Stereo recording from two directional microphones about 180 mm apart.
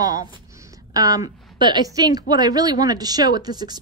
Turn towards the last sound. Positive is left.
turn(degrees=-25)  # may be behind; listen again after turning